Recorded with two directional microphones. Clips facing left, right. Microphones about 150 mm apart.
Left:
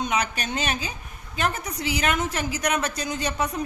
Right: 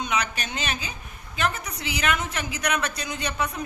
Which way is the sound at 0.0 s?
45° left (ahead or behind).